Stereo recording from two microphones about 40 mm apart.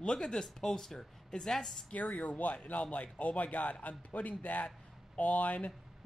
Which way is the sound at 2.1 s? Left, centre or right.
Left.